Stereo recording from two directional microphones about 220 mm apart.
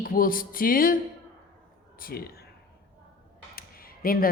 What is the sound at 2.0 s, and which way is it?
Speech, 45° left (ahead or behind).